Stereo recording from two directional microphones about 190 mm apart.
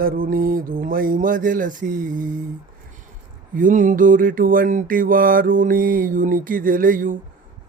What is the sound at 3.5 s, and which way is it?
Mantra, 45° right (ahead or behind).